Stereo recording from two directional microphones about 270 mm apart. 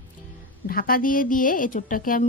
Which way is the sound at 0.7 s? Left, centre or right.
Left.